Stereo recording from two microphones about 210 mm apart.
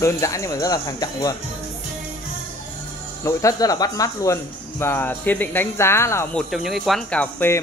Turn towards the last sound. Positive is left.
turn(degrees=10)  # may be behind; listen again after turning